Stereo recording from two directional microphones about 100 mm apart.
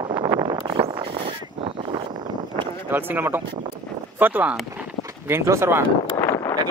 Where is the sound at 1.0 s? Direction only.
60° right (ahead or behind).